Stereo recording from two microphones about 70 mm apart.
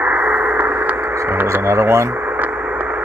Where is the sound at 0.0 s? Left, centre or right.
Centre.